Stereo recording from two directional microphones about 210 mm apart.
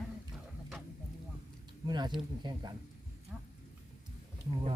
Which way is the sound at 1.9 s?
20° right (ahead or behind).